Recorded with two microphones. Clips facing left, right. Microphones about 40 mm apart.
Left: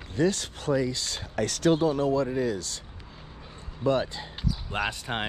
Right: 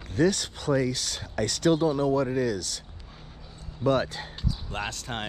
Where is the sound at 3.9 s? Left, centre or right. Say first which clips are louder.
Right 1 dB; right.